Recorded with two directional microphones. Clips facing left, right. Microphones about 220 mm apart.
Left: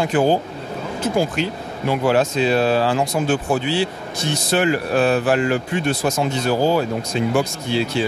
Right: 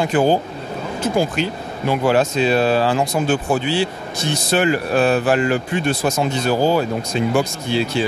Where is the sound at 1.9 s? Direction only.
20° right (ahead or behind).